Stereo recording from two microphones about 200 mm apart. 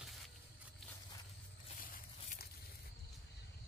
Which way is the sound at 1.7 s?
45° left (ahead or behind).